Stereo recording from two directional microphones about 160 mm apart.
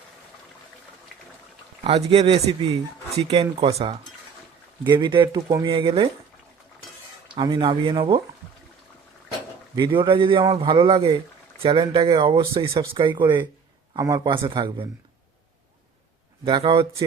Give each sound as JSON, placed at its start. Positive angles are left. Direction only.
{"t": 1.8, "sound": "speech", "side_deg": -35}
{"t": 7.3, "sound": "speech", "side_deg": -30}
{"t": 9.7, "sound": "speech", "side_deg": -30}
{"t": 16.4, "sound": "speech", "side_deg": -25}